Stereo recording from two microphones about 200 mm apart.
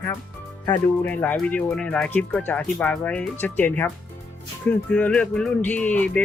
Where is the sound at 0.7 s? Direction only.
10° left (ahead or behind).